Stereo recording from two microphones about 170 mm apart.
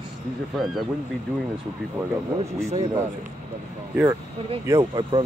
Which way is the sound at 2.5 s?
40° right (ahead or behind).